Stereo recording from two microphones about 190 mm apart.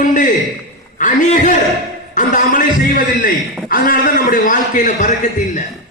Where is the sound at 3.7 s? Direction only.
50° left (ahead or behind).